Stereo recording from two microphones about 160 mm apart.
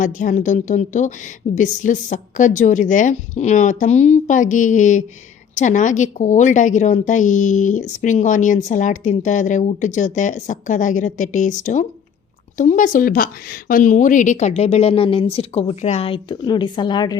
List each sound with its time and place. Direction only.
0.0 s a woman's voice: 55° left (ahead or behind); by 17.2 s 25° left (ahead or behind)